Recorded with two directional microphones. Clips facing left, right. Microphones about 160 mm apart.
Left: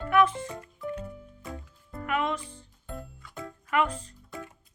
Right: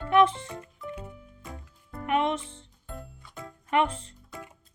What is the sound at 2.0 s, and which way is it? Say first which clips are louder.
Speech: right 3 dB; 25° right (ahead or behind).